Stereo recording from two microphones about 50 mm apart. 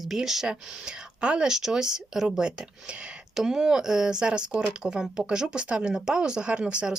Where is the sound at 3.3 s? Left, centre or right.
Centre.